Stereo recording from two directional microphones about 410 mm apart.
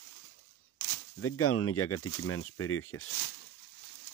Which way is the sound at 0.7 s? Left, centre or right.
Left.